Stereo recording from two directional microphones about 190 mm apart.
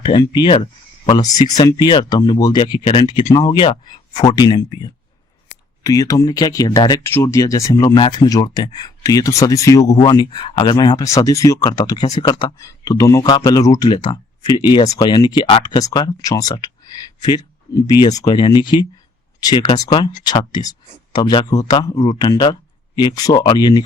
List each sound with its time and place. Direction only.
0.0 s speech: 25° left (ahead or behind)